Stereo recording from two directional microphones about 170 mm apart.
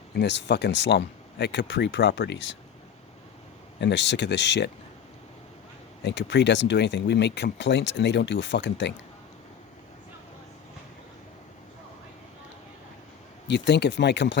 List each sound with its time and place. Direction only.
0.2 s speech: 90° left
3.8 s speech: 90° left
6.0 s speech: 90° left
13.5 s speech: 85° left